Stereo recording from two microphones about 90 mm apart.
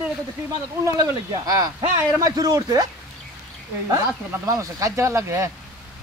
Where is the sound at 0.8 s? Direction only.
45° right (ahead or behind).